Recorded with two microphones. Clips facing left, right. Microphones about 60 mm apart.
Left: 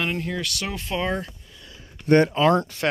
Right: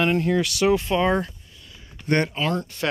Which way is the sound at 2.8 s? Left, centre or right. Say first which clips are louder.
Right 1 dB; left.